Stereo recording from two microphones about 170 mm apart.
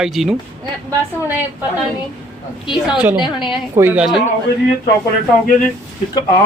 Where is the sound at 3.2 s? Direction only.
25° left (ahead or behind).